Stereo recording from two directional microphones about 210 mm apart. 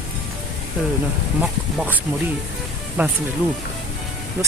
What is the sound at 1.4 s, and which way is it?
Speech, 5° right (ahead or behind).